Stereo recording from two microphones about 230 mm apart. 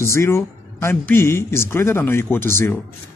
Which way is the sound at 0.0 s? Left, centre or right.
Centre.